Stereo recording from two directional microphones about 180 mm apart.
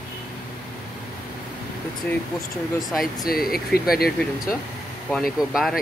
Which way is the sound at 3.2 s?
55° left (ahead or behind).